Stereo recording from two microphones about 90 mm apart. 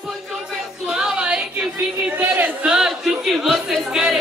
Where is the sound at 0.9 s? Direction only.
10° right (ahead or behind).